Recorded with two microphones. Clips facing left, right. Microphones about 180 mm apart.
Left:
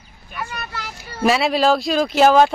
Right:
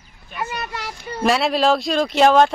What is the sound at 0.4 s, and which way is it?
Speech, 20° right (ahead or behind).